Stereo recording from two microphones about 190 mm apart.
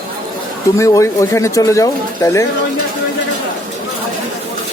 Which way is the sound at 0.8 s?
15° left (ahead or behind).